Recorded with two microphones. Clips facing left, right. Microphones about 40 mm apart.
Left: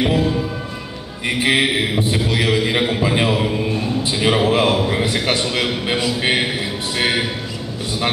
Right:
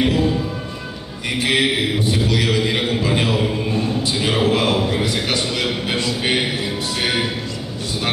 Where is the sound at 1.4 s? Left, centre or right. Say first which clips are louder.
Left 1 dB; centre.